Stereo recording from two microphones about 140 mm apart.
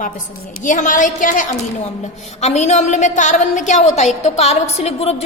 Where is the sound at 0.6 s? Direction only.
65° left (ahead or behind).